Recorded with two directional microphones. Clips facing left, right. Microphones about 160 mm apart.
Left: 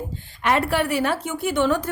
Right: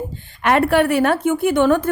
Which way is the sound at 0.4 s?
55° right (ahead or behind).